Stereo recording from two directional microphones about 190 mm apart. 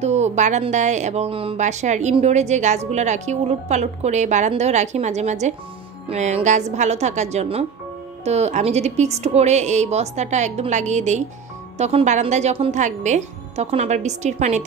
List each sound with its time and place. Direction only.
0.0 s speech: 35° right (ahead or behind)